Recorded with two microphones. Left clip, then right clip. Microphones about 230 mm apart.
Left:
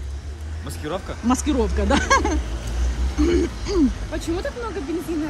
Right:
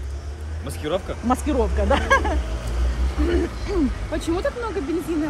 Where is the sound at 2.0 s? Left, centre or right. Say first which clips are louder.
Left 1 dB; centre.